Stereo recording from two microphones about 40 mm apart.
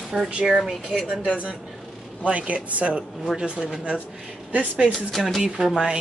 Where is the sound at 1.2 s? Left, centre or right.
Right.